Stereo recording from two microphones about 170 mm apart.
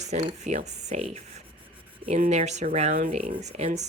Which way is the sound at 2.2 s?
40° right (ahead or behind).